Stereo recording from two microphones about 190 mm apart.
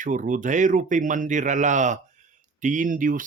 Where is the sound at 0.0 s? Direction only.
40° right (ahead or behind).